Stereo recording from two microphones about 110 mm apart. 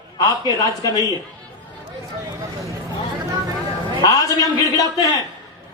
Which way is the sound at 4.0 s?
35° left (ahead or behind).